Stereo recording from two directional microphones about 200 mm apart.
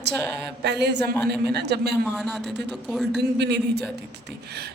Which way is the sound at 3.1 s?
55° right (ahead or behind).